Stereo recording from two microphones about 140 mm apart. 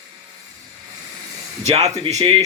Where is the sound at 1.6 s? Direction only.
50° right (ahead or behind).